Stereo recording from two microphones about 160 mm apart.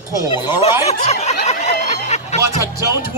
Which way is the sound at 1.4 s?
45° left (ahead or behind).